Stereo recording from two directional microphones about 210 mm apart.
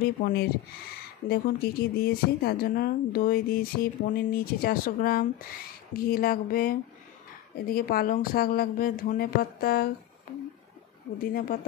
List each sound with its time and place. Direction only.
0.0 s speech: 50° left (ahead or behind)
11.1 s speech: 45° left (ahead or behind)